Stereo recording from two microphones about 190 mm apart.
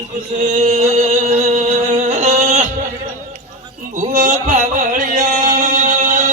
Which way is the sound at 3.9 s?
40° right (ahead or behind).